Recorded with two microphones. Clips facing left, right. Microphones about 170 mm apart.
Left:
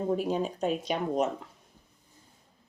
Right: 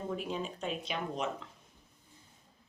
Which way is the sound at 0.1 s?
40° left (ahead or behind).